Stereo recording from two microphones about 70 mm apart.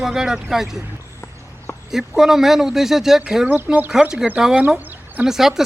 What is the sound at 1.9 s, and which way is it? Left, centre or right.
Speech, centre.